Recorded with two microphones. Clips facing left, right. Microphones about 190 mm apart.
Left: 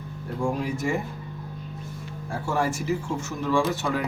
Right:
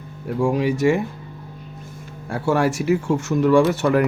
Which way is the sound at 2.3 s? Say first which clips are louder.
Right 7 dB; 75° right (ahead or behind).